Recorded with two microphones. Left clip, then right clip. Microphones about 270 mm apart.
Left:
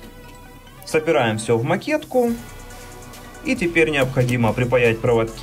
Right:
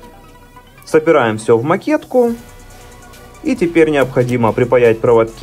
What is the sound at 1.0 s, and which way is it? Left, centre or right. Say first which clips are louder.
Speech: right 6 dB; centre.